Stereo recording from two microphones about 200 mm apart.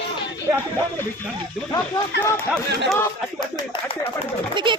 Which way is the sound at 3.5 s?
25° left (ahead or behind).